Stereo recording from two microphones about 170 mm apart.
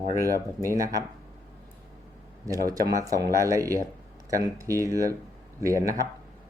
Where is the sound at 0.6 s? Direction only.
20° right (ahead or behind).